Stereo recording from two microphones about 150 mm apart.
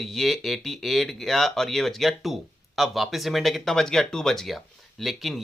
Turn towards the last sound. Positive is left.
turn(degrees=0)  # may be behind; listen again after turning